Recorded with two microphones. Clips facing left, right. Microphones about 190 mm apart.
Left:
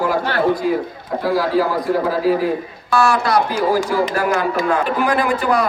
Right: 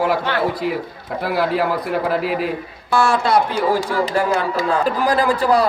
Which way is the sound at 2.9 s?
25° right (ahead or behind).